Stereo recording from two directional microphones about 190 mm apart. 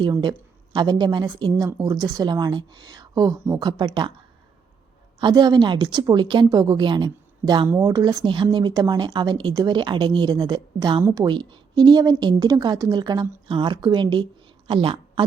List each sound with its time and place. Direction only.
0.0 s speech: 25° right (ahead or behind)
5.2 s a woman's voice: 20° right (ahead or behind)